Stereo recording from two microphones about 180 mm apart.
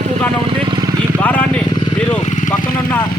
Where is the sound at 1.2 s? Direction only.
10° left (ahead or behind).